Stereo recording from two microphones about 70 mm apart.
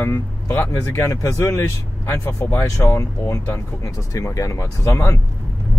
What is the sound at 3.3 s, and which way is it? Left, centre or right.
Speech, left.